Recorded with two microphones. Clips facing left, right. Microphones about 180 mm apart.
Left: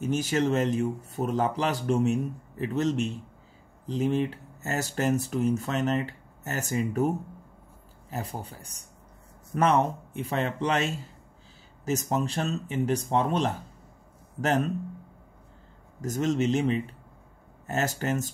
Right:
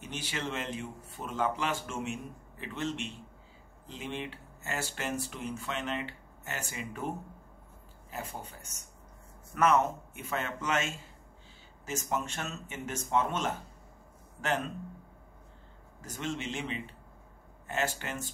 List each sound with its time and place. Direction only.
0.0 s speech: 45° left (ahead or behind)
16.0 s speech: 40° left (ahead or behind)